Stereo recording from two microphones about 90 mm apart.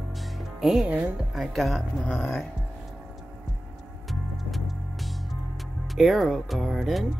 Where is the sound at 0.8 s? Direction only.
20° right (ahead or behind).